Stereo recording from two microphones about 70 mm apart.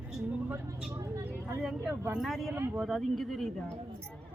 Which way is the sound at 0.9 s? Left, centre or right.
Right.